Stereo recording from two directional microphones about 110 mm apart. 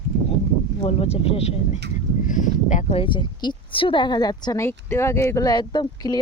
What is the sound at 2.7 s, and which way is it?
Speech, 65° left (ahead or behind).